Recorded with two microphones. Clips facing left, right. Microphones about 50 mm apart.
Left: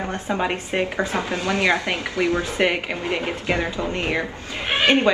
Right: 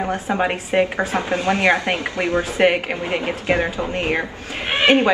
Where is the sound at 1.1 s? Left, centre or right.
Right.